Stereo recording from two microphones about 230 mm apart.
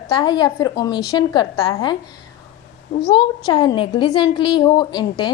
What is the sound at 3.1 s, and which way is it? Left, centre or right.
A woman's voice, left.